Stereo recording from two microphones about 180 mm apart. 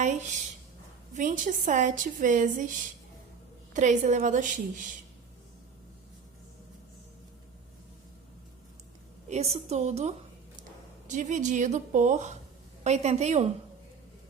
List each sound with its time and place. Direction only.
1.1 s a woman's voice: 45° right (ahead or behind)
9.3 s a woman's voice: 35° right (ahead or behind)